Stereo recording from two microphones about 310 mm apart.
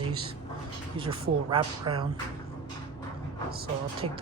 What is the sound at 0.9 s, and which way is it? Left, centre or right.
Speech, centre.